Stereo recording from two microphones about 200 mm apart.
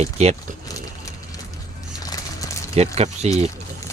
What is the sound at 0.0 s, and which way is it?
Speech, 35° right (ahead or behind).